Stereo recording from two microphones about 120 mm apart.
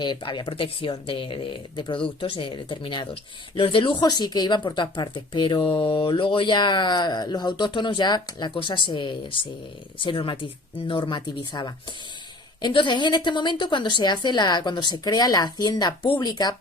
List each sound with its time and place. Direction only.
0.0 s speech: 40° left (ahead or behind)